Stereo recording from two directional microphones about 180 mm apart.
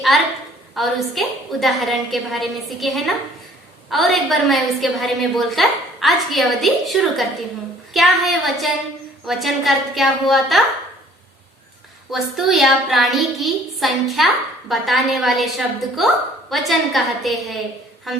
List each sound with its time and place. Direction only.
0.7 s a woman's voice: centre (ahead or behind)
12.1 s a woman's voice: centre (ahead or behind)